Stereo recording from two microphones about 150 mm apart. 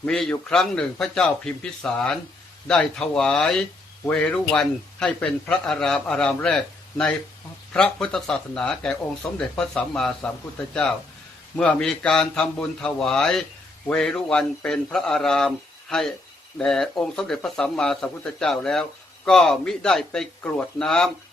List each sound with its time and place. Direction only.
0.0 s speech: 5° left (ahead or behind)
11.5 s speech: 5° left (ahead or behind)